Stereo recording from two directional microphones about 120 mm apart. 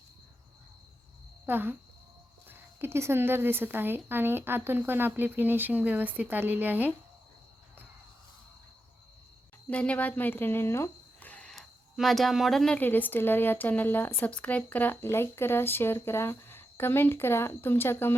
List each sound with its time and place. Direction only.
1.5 s a woman's voice: 15° right (ahead or behind)
9.6 s speech: 10° left (ahead or behind)